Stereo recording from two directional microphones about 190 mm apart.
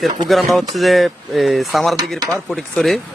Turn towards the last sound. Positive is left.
turn(degrees=0)  # may be behind; listen again after turning